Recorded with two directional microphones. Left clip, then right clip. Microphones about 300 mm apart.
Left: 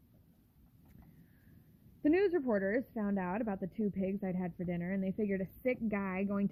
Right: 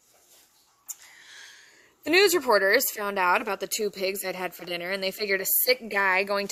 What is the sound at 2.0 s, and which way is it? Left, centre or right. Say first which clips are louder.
A woman's voice: right 10 dB; centre.